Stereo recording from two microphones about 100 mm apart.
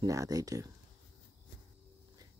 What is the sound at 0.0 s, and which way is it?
Speech, 35° right (ahead or behind).